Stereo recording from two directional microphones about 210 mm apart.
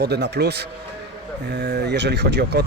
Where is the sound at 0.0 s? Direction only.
50° right (ahead or behind).